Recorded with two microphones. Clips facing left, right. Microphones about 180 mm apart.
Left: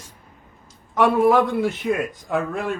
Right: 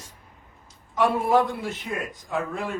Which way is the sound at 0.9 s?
65° left (ahead or behind).